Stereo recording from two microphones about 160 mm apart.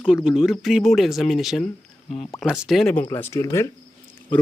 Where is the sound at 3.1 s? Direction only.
15° left (ahead or behind).